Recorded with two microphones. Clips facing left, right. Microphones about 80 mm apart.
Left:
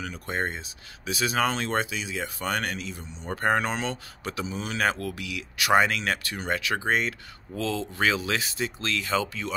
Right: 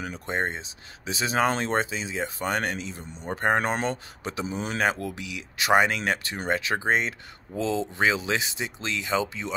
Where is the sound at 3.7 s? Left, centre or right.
Right.